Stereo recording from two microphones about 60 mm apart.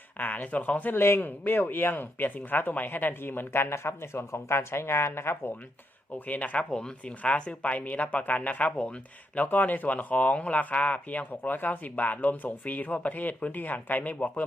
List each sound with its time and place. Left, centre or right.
0.2 s speech: left
6.1 s speech: left
6.7 s speech: centre